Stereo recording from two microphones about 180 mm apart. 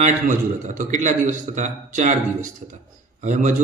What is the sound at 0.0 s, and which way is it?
A man's voice, 45° right (ahead or behind).